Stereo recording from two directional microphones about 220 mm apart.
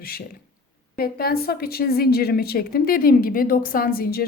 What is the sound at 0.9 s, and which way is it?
A woman's voice, 45° left (ahead or behind).